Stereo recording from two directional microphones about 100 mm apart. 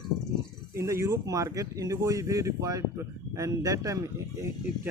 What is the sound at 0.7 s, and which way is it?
Speech, 30° right (ahead or behind).